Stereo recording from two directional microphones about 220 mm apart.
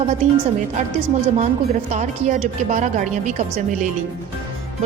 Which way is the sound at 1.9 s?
35° right (ahead or behind).